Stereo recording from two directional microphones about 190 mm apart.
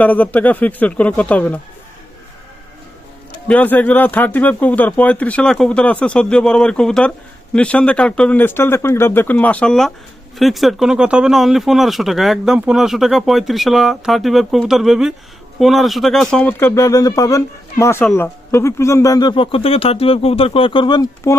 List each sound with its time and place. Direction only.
0.0 s speech: 10° left (ahead or behind)
3.5 s speech: 10° left (ahead or behind)